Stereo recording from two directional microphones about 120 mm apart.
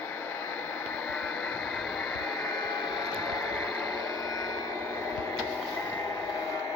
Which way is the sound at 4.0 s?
30° left (ahead or behind).